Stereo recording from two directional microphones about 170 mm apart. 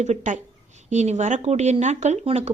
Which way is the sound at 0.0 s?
45° right (ahead or behind).